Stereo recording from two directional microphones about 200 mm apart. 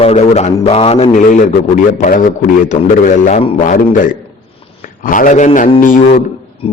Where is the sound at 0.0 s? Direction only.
30° left (ahead or behind).